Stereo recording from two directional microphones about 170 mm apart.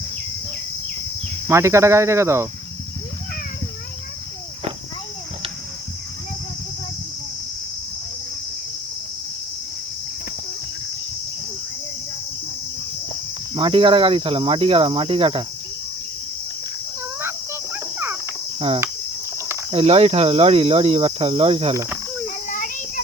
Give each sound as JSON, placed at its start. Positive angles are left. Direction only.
{"t": 1.5, "sound": "speech", "side_deg": -15}
{"t": 13.5, "sound": "speech", "side_deg": -30}
{"t": 17.2, "sound": "cricket", "side_deg": -15}
{"t": 19.7, "sound": "speech", "side_deg": -35}
{"t": 21.7, "sound": "speech", "side_deg": -15}
{"t": 22.4, "sound": "a sound", "side_deg": 50}